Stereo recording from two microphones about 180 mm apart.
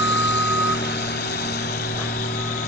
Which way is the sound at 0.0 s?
80° left.